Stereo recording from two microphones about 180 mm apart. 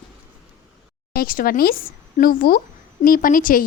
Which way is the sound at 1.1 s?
55° left (ahead or behind).